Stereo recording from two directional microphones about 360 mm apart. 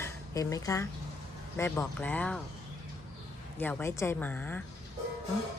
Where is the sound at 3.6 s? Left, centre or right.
Centre.